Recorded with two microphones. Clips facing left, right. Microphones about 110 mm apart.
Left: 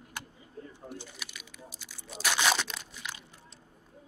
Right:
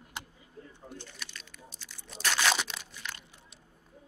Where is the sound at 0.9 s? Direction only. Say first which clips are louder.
Left 2 dB; 10° left (ahead or behind).